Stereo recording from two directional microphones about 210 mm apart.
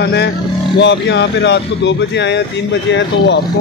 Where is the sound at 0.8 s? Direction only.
55° left (ahead or behind).